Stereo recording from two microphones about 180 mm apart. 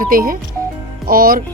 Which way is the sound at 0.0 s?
50° right (ahead or behind).